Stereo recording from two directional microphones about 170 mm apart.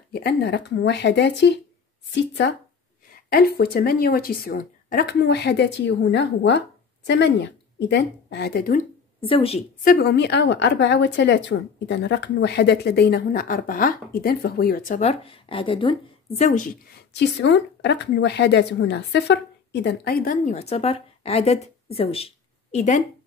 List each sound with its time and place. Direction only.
0.1 s a woman's voice: 75° left (ahead or behind); by 2.5 s 90° left
3.1 s speech: 60° left (ahead or behind)
9.2 s a woman's voice: 30° left (ahead or behind)
9.8 s a woman's voice: 70° left (ahead or behind); by 16.4 s 30° left (ahead or behind)
16.4 s a woman's voice: 50° left (ahead or behind)
17.1 s a woman's voice: 90° left; by 20.5 s 55° left (ahead or behind)
20.5 s a woman's voice: 40° left (ahead or behind)